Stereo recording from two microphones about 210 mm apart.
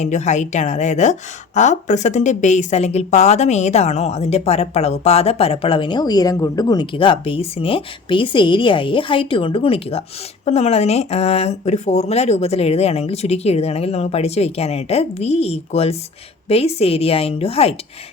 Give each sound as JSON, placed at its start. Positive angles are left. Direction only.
{"t": 0.0, "sound": "speech", "side_deg": 35}